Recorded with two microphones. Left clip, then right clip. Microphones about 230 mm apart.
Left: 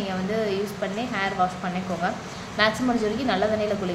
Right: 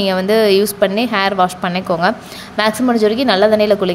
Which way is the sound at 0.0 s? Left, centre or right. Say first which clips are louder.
Right 14 dB; right.